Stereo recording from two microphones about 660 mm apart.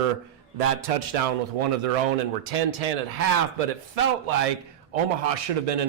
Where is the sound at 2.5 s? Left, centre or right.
Right.